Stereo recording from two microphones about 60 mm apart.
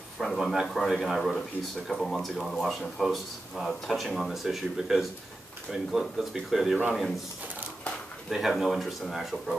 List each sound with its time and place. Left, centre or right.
0.2 s speech: centre
8.3 s speech: centre